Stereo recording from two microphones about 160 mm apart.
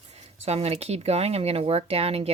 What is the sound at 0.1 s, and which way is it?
Speech, 40° right (ahead or behind).